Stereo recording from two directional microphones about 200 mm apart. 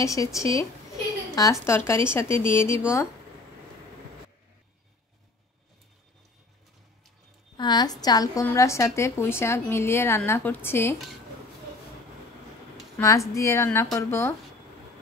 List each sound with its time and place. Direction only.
0.0 s a woman's voice: 15° left (ahead or behind)
7.5 s a woman's voice: 20° left (ahead or behind)
12.9 s a woman's voice: 15° left (ahead or behind)